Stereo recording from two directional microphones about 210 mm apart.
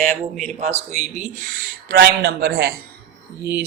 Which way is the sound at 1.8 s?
50° right (ahead or behind).